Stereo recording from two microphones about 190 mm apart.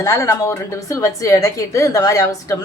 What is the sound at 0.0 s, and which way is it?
A woman's voice, 15° left (ahead or behind).